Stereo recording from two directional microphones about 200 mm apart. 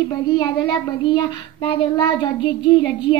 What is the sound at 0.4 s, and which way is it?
Child singing, 20° left (ahead or behind).